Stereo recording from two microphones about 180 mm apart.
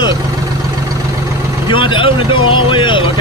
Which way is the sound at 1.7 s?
30° left (ahead or behind).